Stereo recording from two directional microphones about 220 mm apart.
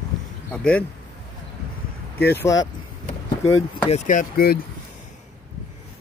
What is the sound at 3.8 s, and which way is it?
Speech, 30° left (ahead or behind).